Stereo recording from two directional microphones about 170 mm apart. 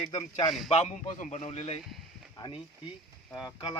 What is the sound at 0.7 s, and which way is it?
A man's voice, 40° left (ahead or behind).